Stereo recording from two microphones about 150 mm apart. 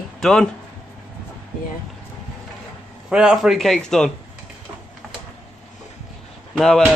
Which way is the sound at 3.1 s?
5° right (ahead or behind).